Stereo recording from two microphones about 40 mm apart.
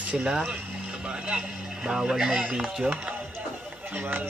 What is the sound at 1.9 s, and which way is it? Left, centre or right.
Speech, centre.